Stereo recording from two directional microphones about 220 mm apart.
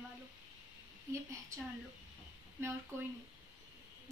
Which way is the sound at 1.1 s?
15° right (ahead or behind).